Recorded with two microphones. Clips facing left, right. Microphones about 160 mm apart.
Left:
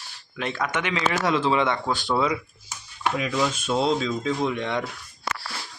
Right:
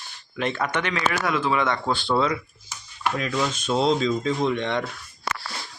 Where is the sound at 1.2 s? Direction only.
25° left (ahead or behind); by 4.9 s 5° left (ahead or behind).